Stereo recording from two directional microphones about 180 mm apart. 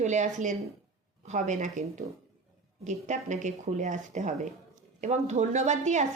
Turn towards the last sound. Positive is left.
turn(degrees=-40)  # may be behind; listen again after turning